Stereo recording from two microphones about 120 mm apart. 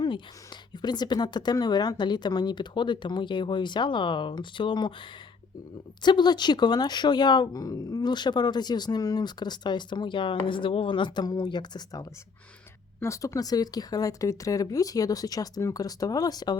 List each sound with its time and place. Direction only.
0.0 s speech: 40° left (ahead or behind)
13.0 s speech: 25° left (ahead or behind)